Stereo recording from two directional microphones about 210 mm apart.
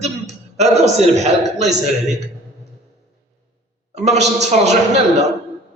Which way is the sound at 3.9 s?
35° right (ahead or behind).